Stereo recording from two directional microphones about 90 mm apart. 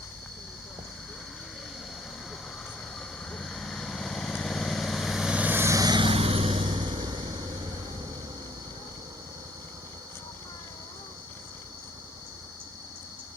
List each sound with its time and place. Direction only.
3.3 s vehicle: 5° left (ahead or behind)
5.4 s vehicle: 20° right (ahead or behind)
5.6 s vehicle: 40° right (ahead or behind)
6.0 s vehicle: 90° right; by 7.3 s 60° right (ahead or behind)